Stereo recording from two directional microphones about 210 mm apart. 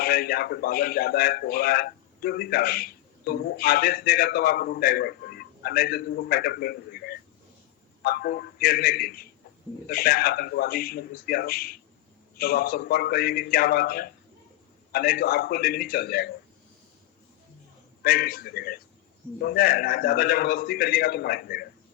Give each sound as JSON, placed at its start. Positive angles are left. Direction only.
{"t": 0.0, "sound": "a man's voice", "side_deg": 45}
{"t": 18.0, "sound": "a man's voice", "side_deg": 45}